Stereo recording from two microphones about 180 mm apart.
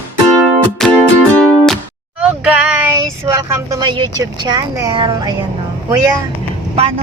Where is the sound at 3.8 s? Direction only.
25° right (ahead or behind).